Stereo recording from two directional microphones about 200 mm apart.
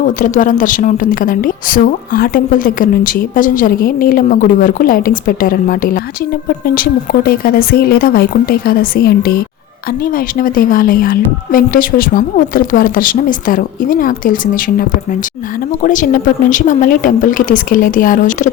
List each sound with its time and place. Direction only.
0.0 s a woman's voice: 40° left (ahead or behind)